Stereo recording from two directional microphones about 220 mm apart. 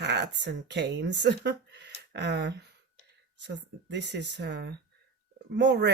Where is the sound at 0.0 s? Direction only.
50° right (ahead or behind).